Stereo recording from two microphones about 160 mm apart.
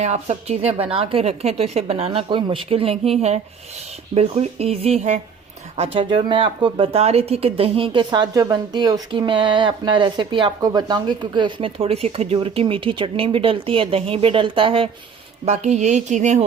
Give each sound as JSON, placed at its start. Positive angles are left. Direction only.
{"t": 0.0, "sound": "speech", "side_deg": -45}
{"t": 15.4, "sound": "speech", "side_deg": -45}